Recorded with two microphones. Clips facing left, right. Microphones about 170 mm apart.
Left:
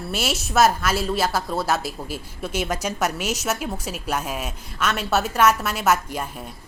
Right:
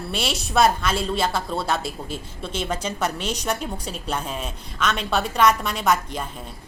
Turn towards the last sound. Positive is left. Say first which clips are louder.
# left 1 dB
turn(degrees=10)  # may be behind; listen again after turning